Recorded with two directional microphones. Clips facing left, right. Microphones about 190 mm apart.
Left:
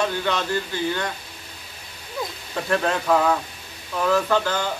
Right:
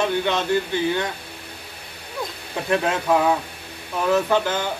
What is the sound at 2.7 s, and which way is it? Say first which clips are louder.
Speech: right 1 dB; 15° right (ahead or behind).